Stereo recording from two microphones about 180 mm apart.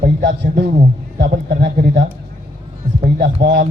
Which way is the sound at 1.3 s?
50° right (ahead or behind).